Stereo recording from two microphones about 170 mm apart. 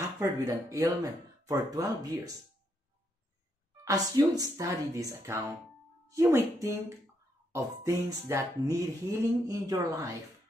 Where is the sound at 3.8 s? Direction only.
20° right (ahead or behind).